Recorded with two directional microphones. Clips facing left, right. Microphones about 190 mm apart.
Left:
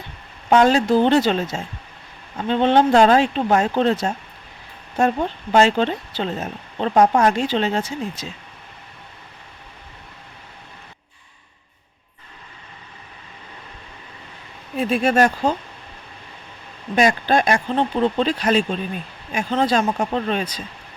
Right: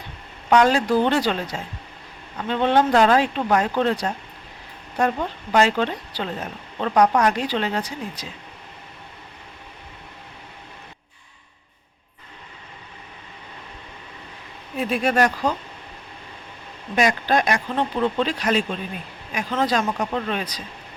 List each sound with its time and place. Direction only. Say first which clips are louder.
0.5 s speech: left 2 dB; 25° left (ahead or behind)
14.8 s speech: left 3 dB; 30° left (ahead or behind)
16.9 s speech: left 3 dB; 30° left (ahead or behind)